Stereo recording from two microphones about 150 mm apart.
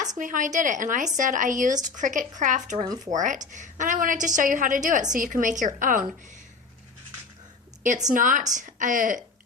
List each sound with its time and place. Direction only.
0.2 s speech: 60° right (ahead or behind)
2.8 s speech: 25° right (ahead or behind)
3.1 s speech: 55° right (ahead or behind)
8.0 s speech: 60° right (ahead or behind)